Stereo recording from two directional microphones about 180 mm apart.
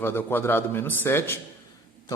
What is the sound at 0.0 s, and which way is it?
A man's voice, 10° left (ahead or behind).